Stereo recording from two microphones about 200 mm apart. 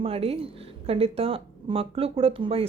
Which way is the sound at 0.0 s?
30° right (ahead or behind).